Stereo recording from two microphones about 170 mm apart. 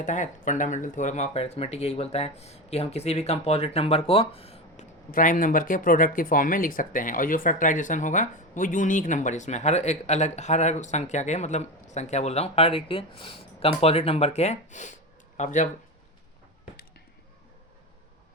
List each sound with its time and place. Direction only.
0.0 s speech: 45° left (ahead or behind)
5.1 s speech: 55° left (ahead or behind)